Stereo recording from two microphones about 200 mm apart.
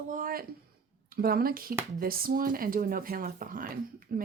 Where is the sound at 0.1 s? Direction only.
45° right (ahead or behind).